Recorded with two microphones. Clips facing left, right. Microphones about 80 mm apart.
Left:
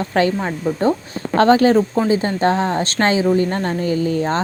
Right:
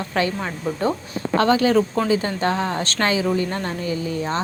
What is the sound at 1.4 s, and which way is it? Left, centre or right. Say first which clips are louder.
A woman's voice: left 5 dB; left.